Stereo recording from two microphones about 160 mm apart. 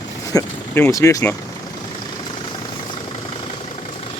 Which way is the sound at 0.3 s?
15° left (ahead or behind).